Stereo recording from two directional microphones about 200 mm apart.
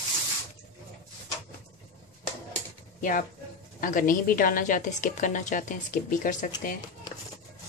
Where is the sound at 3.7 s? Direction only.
40° left (ahead or behind).